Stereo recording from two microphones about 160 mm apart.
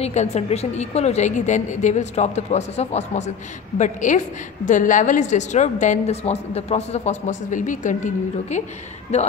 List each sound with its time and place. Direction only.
0.0 s a woman's voice: 45° left (ahead or behind)